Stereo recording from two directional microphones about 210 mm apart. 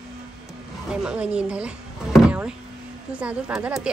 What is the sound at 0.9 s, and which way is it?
Speech, 5° right (ahead or behind).